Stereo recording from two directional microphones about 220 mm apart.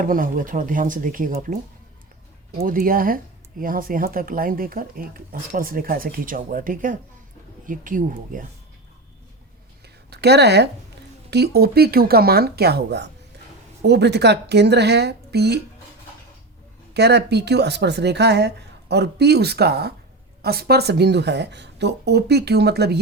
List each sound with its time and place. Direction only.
0.0 s speech: 40° right (ahead or behind)
2.6 s speech: 40° right (ahead or behind)
9.8 s a sound: 50° right (ahead or behind)
11.3 s speech: 50° right (ahead or behind)
16.9 s speech: 50° right (ahead or behind)